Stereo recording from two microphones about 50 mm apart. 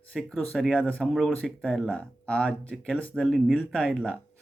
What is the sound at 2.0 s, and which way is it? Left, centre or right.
Speech, left.